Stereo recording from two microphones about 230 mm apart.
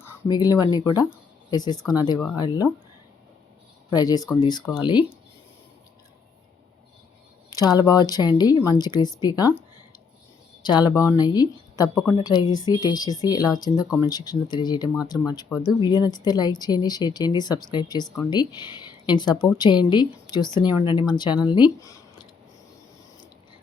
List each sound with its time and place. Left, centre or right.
0.0 s speech: centre
3.9 s speech: centre
7.5 s speech: centre